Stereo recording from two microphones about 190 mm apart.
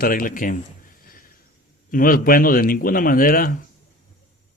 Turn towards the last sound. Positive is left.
turn(degrees=50)  # may be behind; listen again after turning